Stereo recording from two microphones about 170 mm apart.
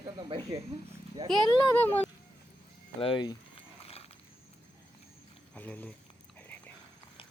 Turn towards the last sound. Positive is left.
turn(degrees=10)  # may be behind; listen again after turning